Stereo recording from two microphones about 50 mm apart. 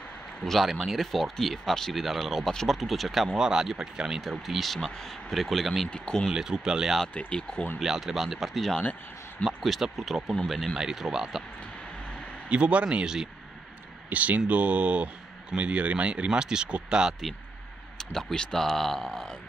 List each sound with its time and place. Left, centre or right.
0.4 s speech: centre
2.4 s speech: centre
3.3 s speech: centre
4.2 s speech: centre
5.9 s speech: centre
6.3 s speech: centre
7.2 s speech: centre
7.8 s speech: centre
12.4 s speech: right
13.0 s speech: centre
14.0 s speech: right; by 17.1 s centre
17.9 s speech: centre